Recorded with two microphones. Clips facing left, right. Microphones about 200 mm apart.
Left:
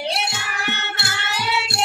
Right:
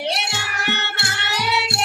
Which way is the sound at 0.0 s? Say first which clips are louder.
Even; 65° right (ahead or behind).